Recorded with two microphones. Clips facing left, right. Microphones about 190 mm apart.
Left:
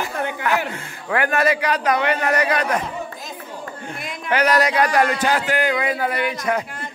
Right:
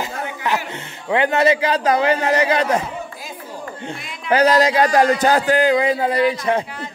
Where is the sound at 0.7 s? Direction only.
20° right (ahead or behind).